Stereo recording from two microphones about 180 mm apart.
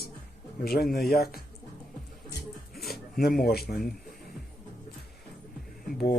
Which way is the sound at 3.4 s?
60° left (ahead or behind).